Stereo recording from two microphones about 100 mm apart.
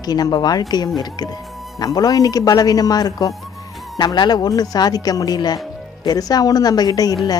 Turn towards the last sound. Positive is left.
turn(degrees=40)  # may be behind; listen again after turning